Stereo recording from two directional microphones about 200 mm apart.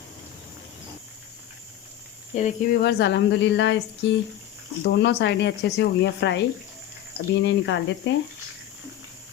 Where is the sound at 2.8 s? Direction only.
60° left (ahead or behind).